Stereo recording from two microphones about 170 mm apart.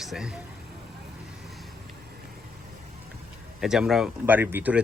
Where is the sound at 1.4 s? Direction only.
Centre (ahead or behind).